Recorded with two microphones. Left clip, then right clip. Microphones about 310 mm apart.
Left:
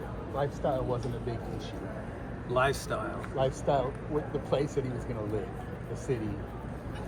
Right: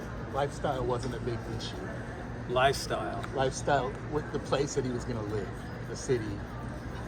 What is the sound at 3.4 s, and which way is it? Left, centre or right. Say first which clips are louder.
Speech: even; right.